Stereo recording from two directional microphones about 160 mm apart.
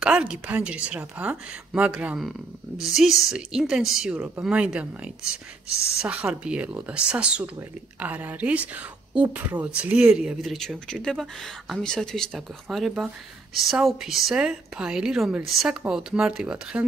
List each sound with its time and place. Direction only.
0.0 s speech: 5° right (ahead or behind)